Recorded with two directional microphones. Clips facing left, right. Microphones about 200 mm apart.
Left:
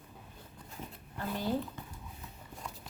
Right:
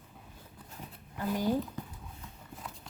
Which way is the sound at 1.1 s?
10° right (ahead or behind).